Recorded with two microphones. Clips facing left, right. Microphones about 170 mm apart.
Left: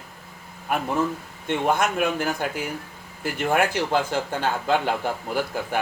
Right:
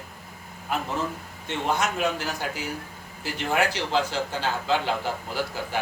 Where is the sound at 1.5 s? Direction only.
55° left (ahead or behind).